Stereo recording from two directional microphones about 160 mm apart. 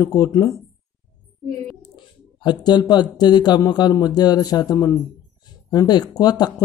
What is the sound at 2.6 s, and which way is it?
A man's voice, 25° left (ahead or behind).